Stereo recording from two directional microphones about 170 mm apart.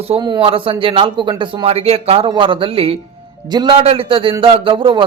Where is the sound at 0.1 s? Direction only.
30° right (ahead or behind).